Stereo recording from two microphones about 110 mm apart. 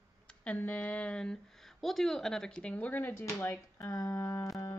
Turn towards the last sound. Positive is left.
turn(degrees=30)  # may be behind; listen again after turning